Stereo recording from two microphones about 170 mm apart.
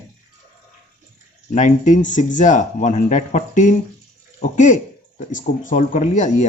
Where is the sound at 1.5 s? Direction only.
45° left (ahead or behind).